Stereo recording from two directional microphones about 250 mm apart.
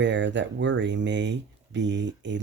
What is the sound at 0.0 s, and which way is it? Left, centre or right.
Speech, right.